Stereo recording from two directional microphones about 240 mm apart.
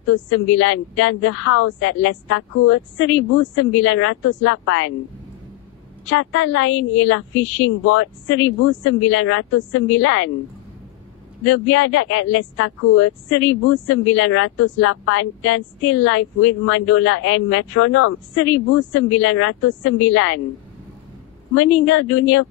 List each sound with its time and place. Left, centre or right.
0.1 s speech: left
3.5 s speech: left
6.0 s speech: left
8.8 s speech: left
11.4 s speech: left
18.9 s speech: left
21.5 s speech: left